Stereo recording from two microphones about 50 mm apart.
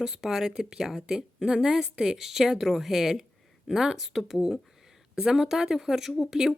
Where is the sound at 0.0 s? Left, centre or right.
Centre.